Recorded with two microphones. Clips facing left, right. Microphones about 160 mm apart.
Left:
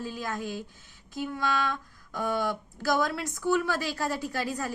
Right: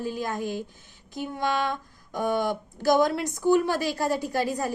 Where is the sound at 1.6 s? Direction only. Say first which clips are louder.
Right 3 dB; 20° right (ahead or behind).